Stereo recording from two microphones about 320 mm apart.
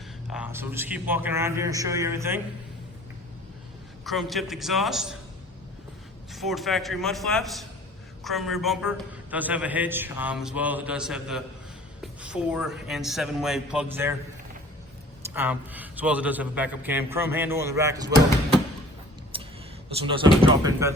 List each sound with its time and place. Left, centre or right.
0.3 s a man's voice: centre
4.0 s a man's voice: centre
6.3 s a man's voice: centre
15.3 s a man's voice: centre
19.3 s a sound: centre
20.0 s a man's voice: centre